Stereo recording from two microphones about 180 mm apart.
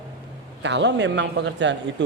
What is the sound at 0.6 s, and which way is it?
A woman's voice, 80° right.